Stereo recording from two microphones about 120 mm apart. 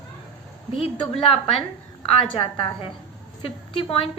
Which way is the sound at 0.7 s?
55° left (ahead or behind).